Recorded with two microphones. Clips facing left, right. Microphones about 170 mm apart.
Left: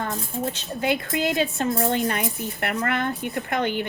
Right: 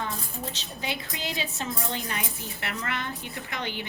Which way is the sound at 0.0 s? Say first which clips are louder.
Left 6 dB; 50° left (ahead or behind).